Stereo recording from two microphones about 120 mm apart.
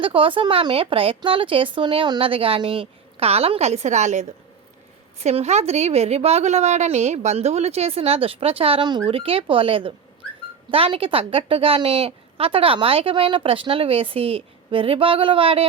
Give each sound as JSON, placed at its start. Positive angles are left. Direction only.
{"t": 0.0, "sound": "a woman's voice", "side_deg": -50}
{"t": 5.2, "sound": "a woman's voice", "side_deg": -65}